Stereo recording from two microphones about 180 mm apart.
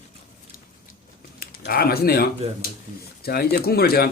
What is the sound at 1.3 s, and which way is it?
Speech, 55° left (ahead or behind).